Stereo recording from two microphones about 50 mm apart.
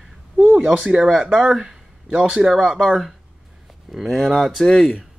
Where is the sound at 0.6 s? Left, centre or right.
Centre.